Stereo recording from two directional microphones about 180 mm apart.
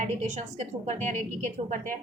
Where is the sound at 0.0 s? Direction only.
40° right (ahead or behind).